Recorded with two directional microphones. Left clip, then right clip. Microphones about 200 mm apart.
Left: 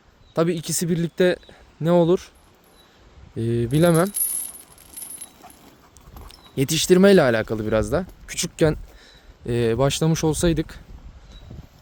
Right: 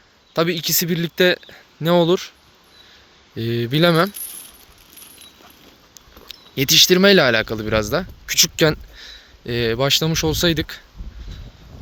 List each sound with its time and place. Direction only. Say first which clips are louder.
0.3 s speech: right 3 dB; 15° left (ahead or behind)
3.3 s speech: right 2 dB; 15° left (ahead or behind)
6.2 s speech: right 5 dB; 15° left (ahead or behind)